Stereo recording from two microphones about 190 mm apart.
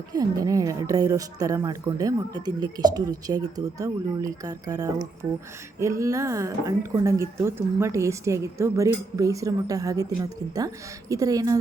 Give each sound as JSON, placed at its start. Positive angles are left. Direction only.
{"t": 0.1, "sound": "a woman's voice", "side_deg": -20}